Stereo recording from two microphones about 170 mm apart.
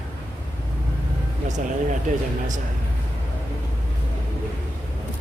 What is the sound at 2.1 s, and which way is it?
Speech, 45° right (ahead or behind).